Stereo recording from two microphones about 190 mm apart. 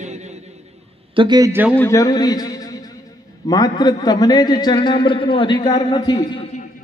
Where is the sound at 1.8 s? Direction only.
15° left (ahead or behind).